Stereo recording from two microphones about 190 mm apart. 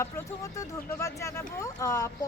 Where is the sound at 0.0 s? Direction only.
15° left (ahead or behind).